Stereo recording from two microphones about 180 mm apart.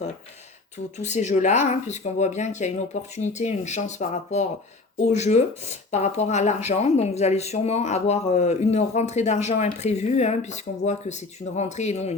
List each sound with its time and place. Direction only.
0.9 s speech: 40° left (ahead or behind)